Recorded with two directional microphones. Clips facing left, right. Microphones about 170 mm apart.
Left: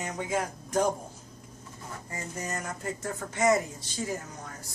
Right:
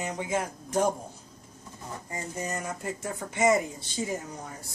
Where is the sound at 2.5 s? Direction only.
20° right (ahead or behind).